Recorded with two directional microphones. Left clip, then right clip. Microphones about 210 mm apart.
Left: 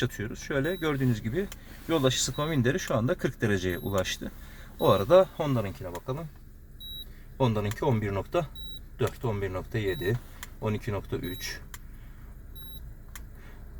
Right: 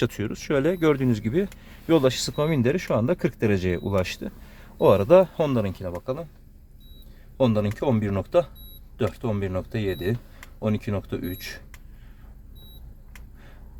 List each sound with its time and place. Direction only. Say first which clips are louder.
0.0 s speech: right 6 dB; 50° right (ahead or behind)
7.3 s speech: right 6 dB; 45° right (ahead or behind)